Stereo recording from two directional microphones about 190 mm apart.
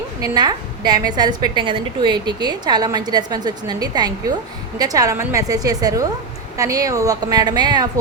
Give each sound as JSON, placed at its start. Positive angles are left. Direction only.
{"t": 0.2, "sound": "a woman's voice", "side_deg": -20}